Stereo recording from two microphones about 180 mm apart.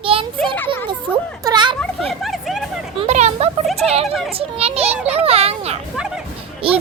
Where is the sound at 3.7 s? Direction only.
35° right (ahead or behind).